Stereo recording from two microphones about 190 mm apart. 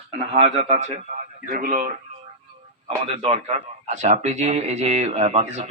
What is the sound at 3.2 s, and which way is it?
Speech, 30° right (ahead or behind).